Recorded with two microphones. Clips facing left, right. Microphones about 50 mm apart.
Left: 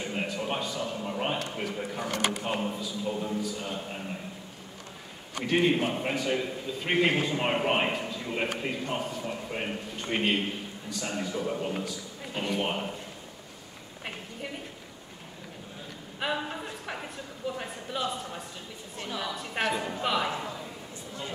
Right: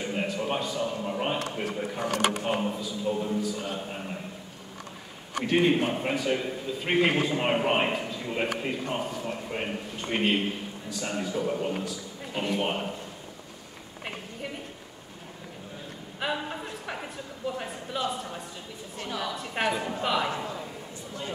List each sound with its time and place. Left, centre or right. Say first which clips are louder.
0.0 s a man's voice: right 2 dB; centre
2.0 s speech: right 4 dB; right
2.6 s a man's voice: right 2 dB; centre
5.4 s a man's voice: right 2 dB; centre
16.2 s a sound: even; centre
17.6 s a man's voice: right 1 dB; centre